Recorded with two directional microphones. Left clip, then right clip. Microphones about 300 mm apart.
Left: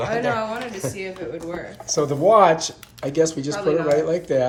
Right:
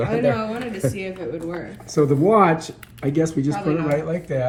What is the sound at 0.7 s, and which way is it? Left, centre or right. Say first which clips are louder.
Speech: right 3 dB; right.